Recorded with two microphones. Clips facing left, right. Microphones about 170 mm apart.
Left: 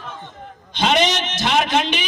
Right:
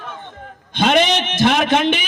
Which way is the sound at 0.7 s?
55° right (ahead or behind).